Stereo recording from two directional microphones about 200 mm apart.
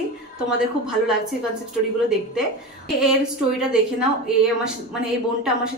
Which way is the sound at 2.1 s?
Centre (ahead or behind).